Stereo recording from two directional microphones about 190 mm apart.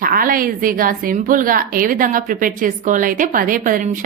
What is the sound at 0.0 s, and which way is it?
A woman's voice, 45° right (ahead or behind).